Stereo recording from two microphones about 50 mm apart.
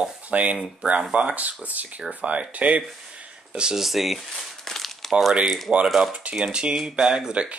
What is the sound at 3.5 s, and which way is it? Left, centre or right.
Speech, centre.